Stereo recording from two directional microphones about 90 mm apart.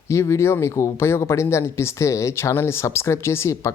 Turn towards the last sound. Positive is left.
turn(degrees=30)  # may be behind; listen again after turning